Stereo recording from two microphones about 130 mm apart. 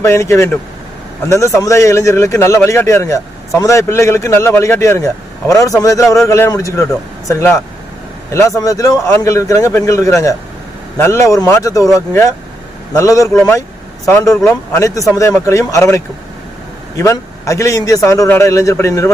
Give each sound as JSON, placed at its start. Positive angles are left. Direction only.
{"t": 0.0, "sound": "a man's voice", "side_deg": 20}